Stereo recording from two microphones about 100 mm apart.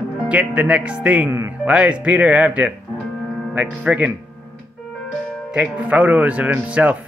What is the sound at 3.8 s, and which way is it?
Speech, 15° right (ahead or behind).